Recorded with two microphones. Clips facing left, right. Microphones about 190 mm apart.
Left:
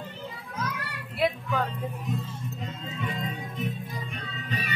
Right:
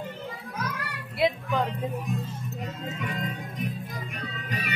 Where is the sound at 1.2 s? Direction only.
15° right (ahead or behind).